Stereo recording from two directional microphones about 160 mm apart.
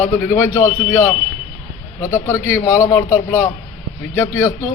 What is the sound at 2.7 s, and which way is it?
Speech, 55° left (ahead or behind).